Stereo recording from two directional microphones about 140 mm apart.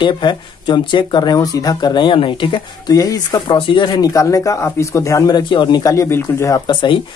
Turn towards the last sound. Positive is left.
turn(degrees=35)  # may be behind; listen again after turning